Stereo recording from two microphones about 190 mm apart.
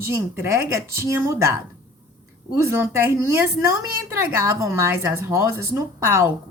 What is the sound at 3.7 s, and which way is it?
A woman's voice, 15° right (ahead or behind).